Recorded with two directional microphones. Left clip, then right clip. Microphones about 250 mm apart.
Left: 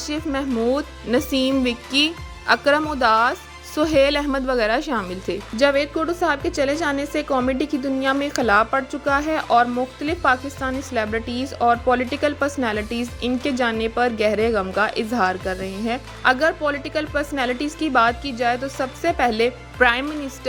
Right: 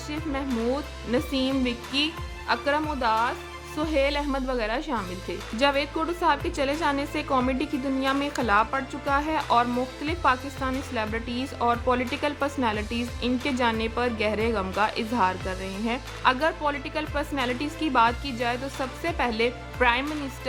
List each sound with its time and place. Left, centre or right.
0.1 s speech: left